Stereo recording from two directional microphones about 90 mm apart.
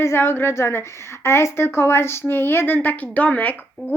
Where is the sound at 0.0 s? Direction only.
25° left (ahead or behind).